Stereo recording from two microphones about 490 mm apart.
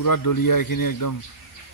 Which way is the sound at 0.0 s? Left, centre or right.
Left.